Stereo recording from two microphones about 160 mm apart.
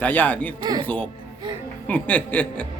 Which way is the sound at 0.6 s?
25° right (ahead or behind).